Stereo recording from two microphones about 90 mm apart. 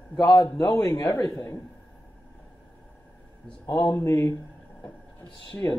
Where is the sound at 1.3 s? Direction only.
30° left (ahead or behind).